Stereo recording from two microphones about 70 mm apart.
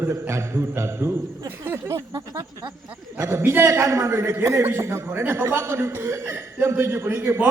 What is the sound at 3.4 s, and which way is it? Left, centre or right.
A man's voice, right.